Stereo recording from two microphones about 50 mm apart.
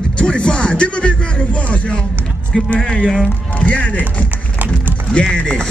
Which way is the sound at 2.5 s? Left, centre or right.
Centre.